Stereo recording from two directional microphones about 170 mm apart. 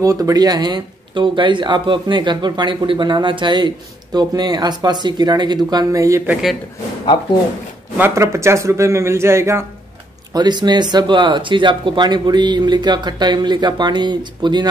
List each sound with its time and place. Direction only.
0.0 s speech: 20° right (ahead or behind)
8.0 s speech: 15° right (ahead or behind)